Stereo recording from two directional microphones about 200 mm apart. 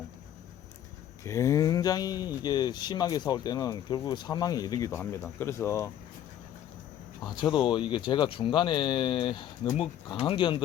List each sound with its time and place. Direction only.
1.2 s speech: 15° left (ahead or behind)
7.3 s speech: 20° left (ahead or behind)